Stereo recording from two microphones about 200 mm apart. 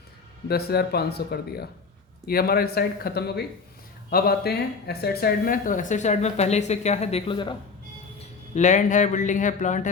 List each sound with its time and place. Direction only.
0.4 s speech: 50° left (ahead or behind); by 7.5 s 25° left (ahead or behind)
8.2 s speech: 35° left (ahead or behind)